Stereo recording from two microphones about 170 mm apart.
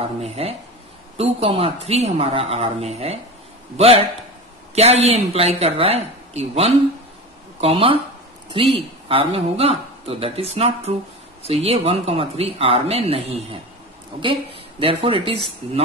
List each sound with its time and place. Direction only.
0.0 s speech: 35° right (ahead or behind)